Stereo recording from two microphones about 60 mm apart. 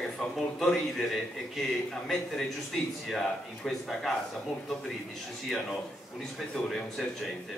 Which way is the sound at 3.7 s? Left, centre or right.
Centre.